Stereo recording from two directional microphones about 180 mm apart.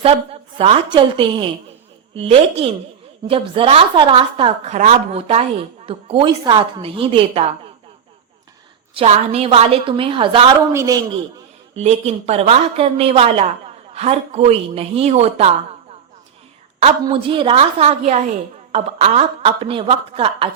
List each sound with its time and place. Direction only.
0.0 s a woman's voice: 30° right (ahead or behind)
9.0 s a woman's voice: 35° right (ahead or behind)
10.7 s a man's voice: 15° right (ahead or behind)
11.8 s a woman's voice: 35° right (ahead or behind)
16.8 s a woman's voice: 30° right (ahead or behind)